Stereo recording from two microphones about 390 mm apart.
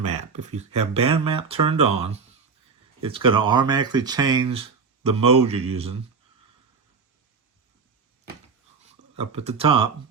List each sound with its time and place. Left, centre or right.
0.0 s speech: centre
3.0 s speech: centre
9.1 s speech: centre